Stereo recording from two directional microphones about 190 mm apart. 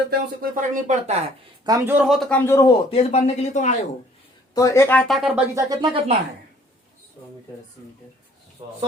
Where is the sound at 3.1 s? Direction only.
35° left (ahead or behind).